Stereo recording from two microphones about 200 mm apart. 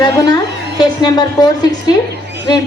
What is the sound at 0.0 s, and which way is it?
A woman's voice, 20° left (ahead or behind).